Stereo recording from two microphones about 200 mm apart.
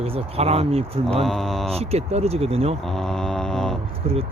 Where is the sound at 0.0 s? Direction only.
30° right (ahead or behind).